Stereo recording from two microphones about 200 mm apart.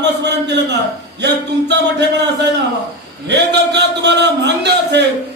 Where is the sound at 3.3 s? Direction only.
55° right (ahead or behind).